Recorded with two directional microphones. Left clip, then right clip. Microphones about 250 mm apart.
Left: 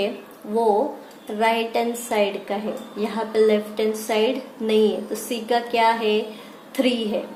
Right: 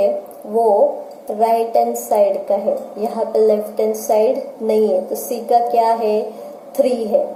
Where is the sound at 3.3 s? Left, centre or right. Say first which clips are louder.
Right 4 dB; left.